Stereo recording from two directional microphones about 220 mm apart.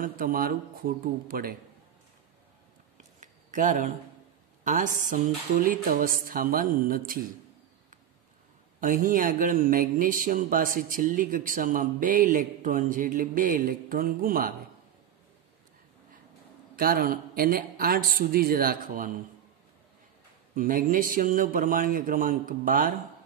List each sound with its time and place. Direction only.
0.0 s speech: 40° right (ahead or behind)
3.2 s a sound: 35° right (ahead or behind)
4.6 s speech: 35° right (ahead or behind)
8.8 s speech: 40° right (ahead or behind)
16.7 s speech: 40° right (ahead or behind)
20.5 s speech: 40° right (ahead or behind)